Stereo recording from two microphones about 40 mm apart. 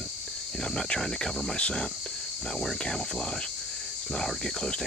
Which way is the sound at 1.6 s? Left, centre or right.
Left.